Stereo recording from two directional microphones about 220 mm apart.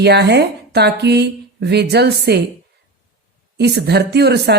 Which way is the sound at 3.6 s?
50° right (ahead or behind).